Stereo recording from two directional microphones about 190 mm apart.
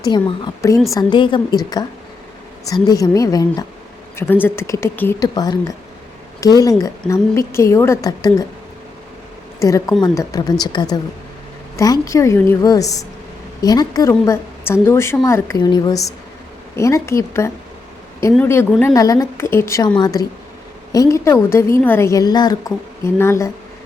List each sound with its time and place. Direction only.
0.0 s a woman's voice: 25° left (ahead or behind)
2.8 s a woman's voice: 20° left (ahead or behind)
9.6 s a woman's voice: 15° left (ahead or behind)